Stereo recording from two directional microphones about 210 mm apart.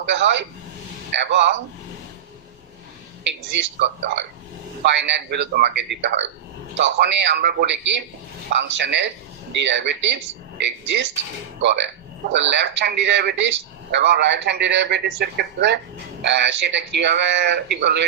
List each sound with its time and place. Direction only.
0.0 s a man's voice: 55° right (ahead or behind)
3.2 s a man's voice: 55° right (ahead or behind)
12.3 s a man's voice: 55° right (ahead or behind)